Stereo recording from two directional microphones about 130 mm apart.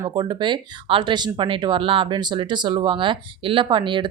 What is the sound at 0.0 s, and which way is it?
Speech, 35° right (ahead or behind).